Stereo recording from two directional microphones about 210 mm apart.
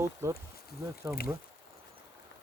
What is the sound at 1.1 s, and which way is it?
Speech, 15° right (ahead or behind).